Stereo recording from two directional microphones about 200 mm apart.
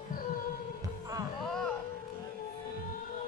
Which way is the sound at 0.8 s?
15° right (ahead or behind).